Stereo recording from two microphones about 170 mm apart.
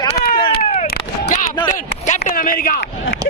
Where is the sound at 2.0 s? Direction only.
45° left (ahead or behind).